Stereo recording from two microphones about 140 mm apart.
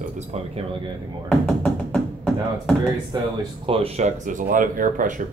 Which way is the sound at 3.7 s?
45° right (ahead or behind).